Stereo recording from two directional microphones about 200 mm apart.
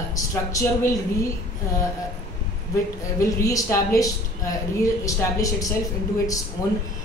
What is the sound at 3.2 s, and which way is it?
A woman's voice, 15° left (ahead or behind).